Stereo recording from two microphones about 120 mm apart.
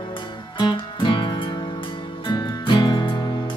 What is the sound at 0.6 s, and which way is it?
Music, 40° left (ahead or behind).